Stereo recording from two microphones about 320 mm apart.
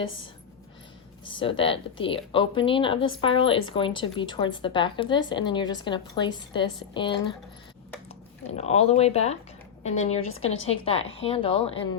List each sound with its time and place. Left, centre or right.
1.4 s a woman's voice: centre
8.4 s a woman's voice: centre